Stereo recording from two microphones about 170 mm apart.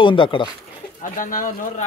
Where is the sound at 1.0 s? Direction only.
55° left (ahead or behind).